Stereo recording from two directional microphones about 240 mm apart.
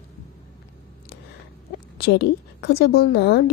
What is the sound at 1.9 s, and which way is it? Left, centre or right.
Speech, left.